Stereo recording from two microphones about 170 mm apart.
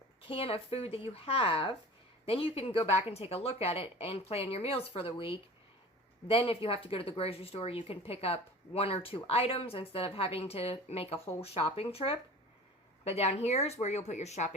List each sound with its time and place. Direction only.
0.2 s speech: 35° left (ahead or behind)